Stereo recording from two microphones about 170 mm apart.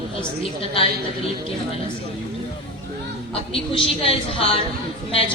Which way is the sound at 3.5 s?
35° left (ahead or behind).